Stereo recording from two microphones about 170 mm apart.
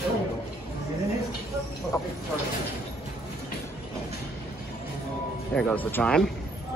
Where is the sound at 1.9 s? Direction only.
15° left (ahead or behind).